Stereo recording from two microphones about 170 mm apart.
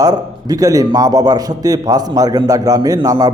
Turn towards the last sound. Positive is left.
turn(degrees=-20)  # may be behind; listen again after turning